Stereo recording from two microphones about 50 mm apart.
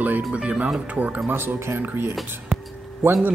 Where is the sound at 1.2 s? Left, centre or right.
Right.